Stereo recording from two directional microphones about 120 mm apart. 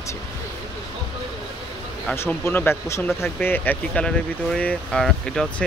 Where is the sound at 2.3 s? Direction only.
15° left (ahead or behind).